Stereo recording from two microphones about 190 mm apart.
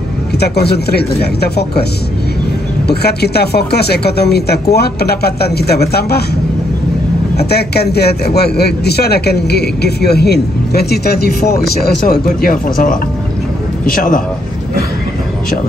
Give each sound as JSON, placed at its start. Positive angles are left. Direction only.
{"t": 0.4, "sound": "a man's voice", "side_deg": 60}
{"t": 2.9, "sound": "a man's voice", "side_deg": 60}
{"t": 7.3, "sound": "a man's voice", "side_deg": 60}